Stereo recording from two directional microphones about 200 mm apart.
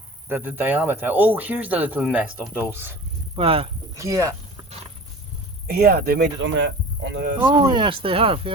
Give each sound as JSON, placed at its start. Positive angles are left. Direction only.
{"t": 0.3, "sound": "speech", "side_deg": -10}
{"t": 3.3, "sound": "speech", "side_deg": -30}
{"t": 3.9, "sound": "speech", "side_deg": -15}
{"t": 5.6, "sound": "speech", "side_deg": -50}
{"t": 7.4, "sound": "speech", "side_deg": -25}